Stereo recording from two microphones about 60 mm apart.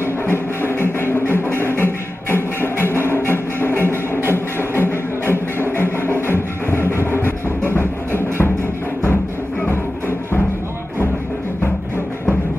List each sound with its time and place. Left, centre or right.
0.3 s music: left
9.7 s music: left